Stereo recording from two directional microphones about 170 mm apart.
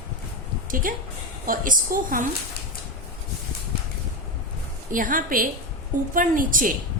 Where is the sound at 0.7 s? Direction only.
55° right (ahead or behind).